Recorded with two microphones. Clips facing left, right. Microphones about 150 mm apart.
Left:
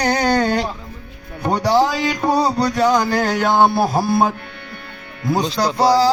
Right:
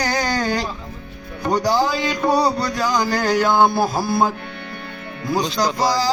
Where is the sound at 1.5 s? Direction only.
70° left (ahead or behind).